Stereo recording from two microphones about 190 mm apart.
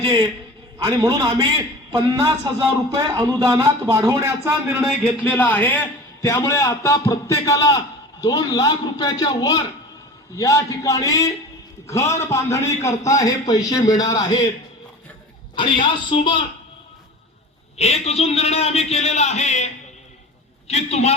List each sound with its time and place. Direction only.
0.0 s a man's voice: 25° right (ahead or behind)
5.2 s a man's voice: 10° left (ahead or behind)
15.5 s a man's voice: 25° left (ahead or behind)
17.7 s a man's voice: 35° left (ahead or behind)